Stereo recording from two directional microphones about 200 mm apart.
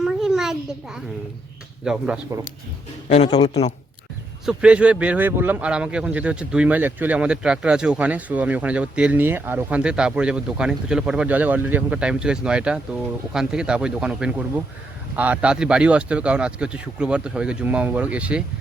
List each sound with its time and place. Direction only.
0.0 s a sound: centre (ahead or behind)
1.8 s speech: 5° right (ahead or behind)
3.2 s speech: 20° left (ahead or behind)
4.4 s speech: 5° right (ahead or behind)